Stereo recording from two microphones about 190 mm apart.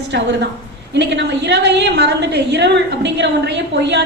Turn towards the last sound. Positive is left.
turn(degrees=-65)  # may be behind; listen again after turning